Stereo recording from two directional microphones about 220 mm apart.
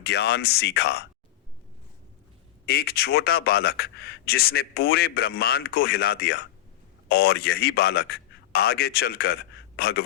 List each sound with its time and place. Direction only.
0.0 s a man's voice: 45° left (ahead or behind)
2.6 s a man's voice: 45° left (ahead or behind)